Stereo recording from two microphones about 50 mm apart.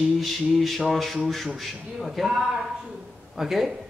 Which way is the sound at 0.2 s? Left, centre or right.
Centre.